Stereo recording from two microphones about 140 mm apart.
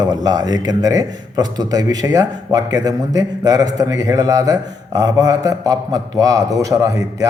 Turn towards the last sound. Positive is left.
turn(degrees=-25)  # may be behind; listen again after turning